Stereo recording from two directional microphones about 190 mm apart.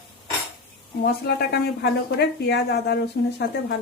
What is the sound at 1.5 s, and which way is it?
A woman's voice, 55° left (ahead or behind).